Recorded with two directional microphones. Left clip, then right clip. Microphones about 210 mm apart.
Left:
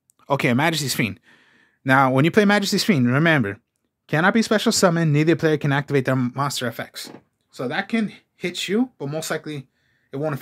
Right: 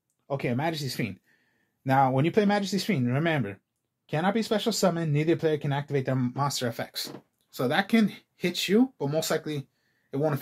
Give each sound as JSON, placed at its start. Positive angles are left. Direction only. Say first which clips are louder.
{"t": 0.3, "sound": "speech", "louder": "left 9 dB", "side_deg": 45}
{"t": 6.9, "sound": "speech", "louder": "even", "side_deg": 10}
{"t": 7.5, "sound": "speech", "louder": "left 1 dB", "side_deg": -5}